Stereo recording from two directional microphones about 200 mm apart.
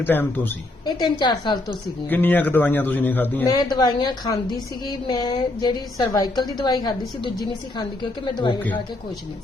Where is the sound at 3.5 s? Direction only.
20° left (ahead or behind).